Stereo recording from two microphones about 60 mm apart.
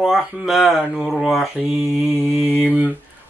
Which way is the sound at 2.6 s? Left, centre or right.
Right.